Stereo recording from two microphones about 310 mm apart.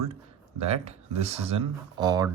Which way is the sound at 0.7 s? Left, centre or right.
Centre.